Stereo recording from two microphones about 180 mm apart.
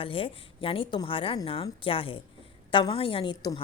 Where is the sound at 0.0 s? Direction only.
30° left (ahead or behind).